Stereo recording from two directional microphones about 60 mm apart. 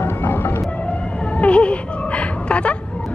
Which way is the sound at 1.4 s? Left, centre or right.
Centre.